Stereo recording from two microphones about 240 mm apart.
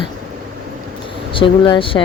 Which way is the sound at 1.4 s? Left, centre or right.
Left.